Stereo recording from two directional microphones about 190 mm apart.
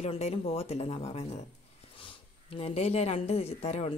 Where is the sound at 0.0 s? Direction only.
30° left (ahead or behind).